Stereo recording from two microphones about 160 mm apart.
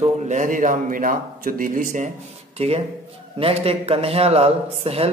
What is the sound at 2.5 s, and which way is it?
Speech, 40° right (ahead or behind).